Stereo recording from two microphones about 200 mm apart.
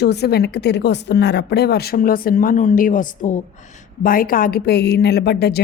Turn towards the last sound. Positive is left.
turn(degrees=55)  # may be behind; listen again after turning